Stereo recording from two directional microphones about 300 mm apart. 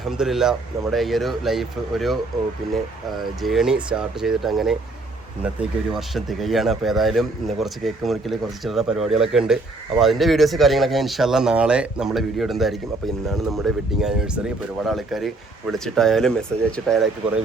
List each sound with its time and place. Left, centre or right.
0.2 s speech: centre
3.4 s speech: centre